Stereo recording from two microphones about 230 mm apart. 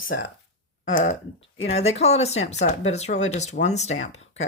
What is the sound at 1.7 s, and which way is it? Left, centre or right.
Speech, left.